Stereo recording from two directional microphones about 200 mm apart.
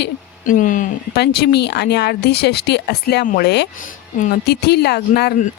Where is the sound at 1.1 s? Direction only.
55° left (ahead or behind).